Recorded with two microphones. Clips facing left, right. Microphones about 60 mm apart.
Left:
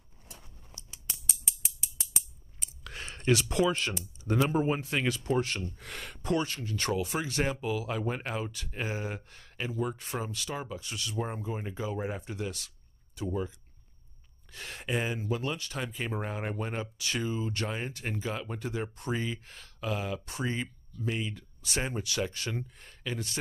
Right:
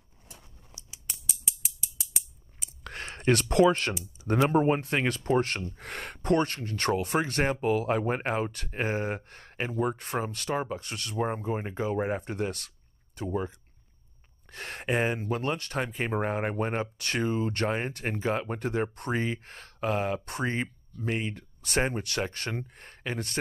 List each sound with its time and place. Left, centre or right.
0.7 s scissors: centre
2.8 s a sound: right
3.3 s speech: right
11.1 s speech: right